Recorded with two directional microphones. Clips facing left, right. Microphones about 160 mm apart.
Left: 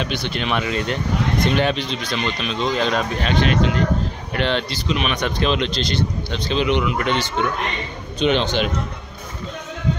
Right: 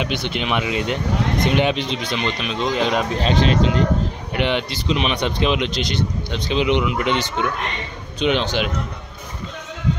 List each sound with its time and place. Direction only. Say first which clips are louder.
0.0 s speech: right 1 dB; 20° right (ahead or behind)
3.2 s speech: right 1 dB; 30° right (ahead or behind)
4.3 s speech: even; 15° right (ahead or behind)
8.2 s speech: left 1 dB; 5° right (ahead or behind)